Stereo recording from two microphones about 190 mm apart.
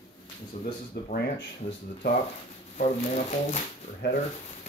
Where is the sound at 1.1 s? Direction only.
60° left (ahead or behind).